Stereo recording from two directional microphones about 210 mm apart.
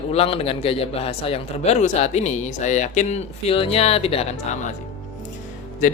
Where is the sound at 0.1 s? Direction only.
30° left (ahead or behind).